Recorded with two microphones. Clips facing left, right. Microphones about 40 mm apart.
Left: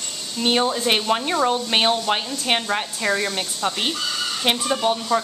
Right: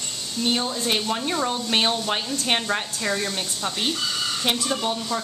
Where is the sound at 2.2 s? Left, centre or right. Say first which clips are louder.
Left 1 dB; centre.